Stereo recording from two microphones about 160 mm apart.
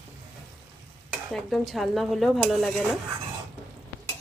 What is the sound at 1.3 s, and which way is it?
Speech, centre (ahead or behind).